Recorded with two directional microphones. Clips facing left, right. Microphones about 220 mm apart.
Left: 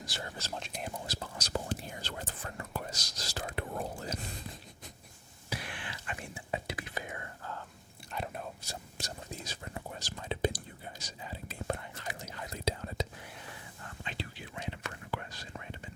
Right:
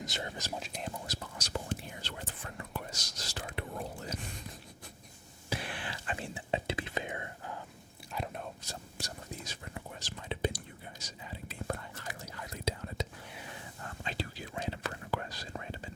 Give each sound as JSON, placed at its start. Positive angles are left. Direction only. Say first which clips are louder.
{"t": 0.0, "sound": "speech", "louder": "right 3 dB", "side_deg": -20}
{"t": 0.6, "sound": "whispering", "louder": "even", "side_deg": 5}
{"t": 1.0, "sound": "whispering", "louder": "left 1 dB", "side_deg": 30}
{"t": 5.5, "sound": "whispering", "louder": "right 3 dB", "side_deg": -30}
{"t": 8.1, "sound": "whispering", "louder": "even", "side_deg": 0}
{"t": 9.0, "sound": "whispering", "louder": "left 1 dB", "side_deg": 20}
{"t": 10.0, "sound": "whispering", "louder": "left 2 dB", "side_deg": 40}
{"t": 11.7, "sound": "whispering", "louder": "left 2 dB", "side_deg": 25}
{"t": 14.0, "sound": "whispering", "louder": "right 3 dB", "side_deg": -35}